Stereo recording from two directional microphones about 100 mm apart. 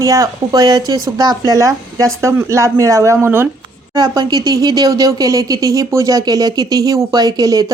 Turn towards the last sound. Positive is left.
turn(degrees=-40)  # may be behind; listen again after turning